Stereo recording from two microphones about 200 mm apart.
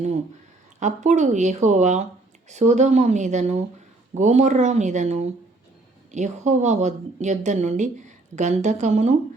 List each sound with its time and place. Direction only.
0.8 s a woman's voice: 35° right (ahead or behind)